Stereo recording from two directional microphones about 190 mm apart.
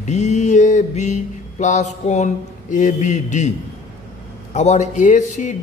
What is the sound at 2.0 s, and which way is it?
Speech, 40° left (ahead or behind).